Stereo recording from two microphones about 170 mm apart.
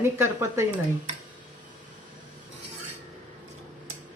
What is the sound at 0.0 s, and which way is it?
Speech, 15° right (ahead or behind).